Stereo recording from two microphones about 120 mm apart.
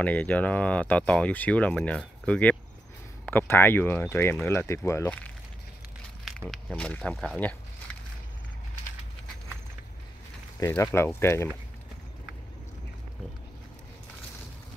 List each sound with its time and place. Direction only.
0.0 s speech: 15° left (ahead or behind)
6.2 s a sound: centre (ahead or behind)
6.7 s speech: 10° left (ahead or behind)
10.7 s speech: 20° left (ahead or behind)